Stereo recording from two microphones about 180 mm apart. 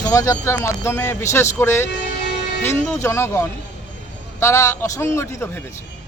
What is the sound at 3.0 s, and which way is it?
Speech, 15° left (ahead or behind).